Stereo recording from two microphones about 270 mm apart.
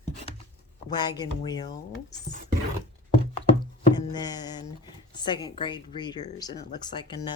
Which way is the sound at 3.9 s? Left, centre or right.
Centre.